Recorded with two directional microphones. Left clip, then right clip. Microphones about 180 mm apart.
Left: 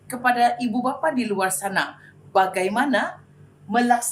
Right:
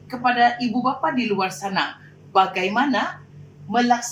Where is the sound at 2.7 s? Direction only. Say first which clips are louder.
Right 1 dB; 15° left (ahead or behind).